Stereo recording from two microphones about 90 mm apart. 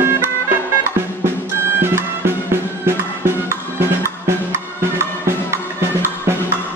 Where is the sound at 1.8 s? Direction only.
25° right (ahead or behind).